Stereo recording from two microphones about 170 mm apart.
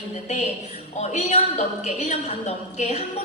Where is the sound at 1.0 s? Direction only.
45° left (ahead or behind).